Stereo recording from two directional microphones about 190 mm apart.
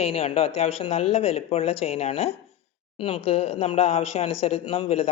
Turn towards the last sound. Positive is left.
turn(degrees=30)  # may be behind; listen again after turning